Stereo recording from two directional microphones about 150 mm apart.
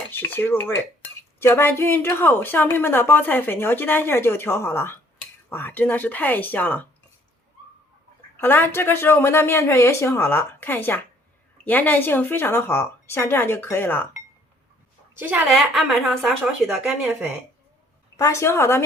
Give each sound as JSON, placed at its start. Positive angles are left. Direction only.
{"t": 0.1, "sound": "dishes", "side_deg": 15}
{"t": 1.4, "sound": "a woman's voice", "side_deg": 15}
{"t": 8.4, "sound": "a woman's voice", "side_deg": 15}
{"t": 15.2, "sound": "a woman's voice", "side_deg": -10}
{"t": 15.4, "sound": "a woman's voice", "side_deg": 0}
{"t": 18.2, "sound": "a woman's voice", "side_deg": 20}